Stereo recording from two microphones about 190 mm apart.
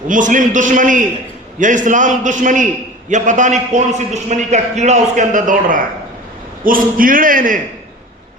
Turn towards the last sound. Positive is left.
turn(degrees=-45)  # may be behind; listen again after turning